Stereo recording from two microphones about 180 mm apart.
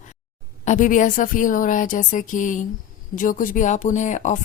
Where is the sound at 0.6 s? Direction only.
45° left (ahead or behind).